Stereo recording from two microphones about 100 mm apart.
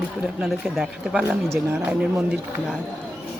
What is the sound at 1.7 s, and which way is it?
Speech, 10° right (ahead or behind).